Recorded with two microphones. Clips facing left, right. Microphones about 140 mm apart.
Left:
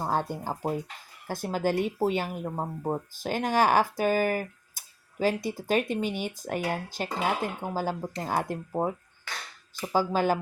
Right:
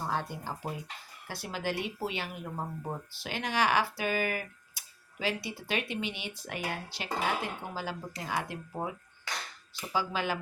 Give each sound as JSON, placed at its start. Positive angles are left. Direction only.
{"t": 0.0, "sound": "speech", "side_deg": 45}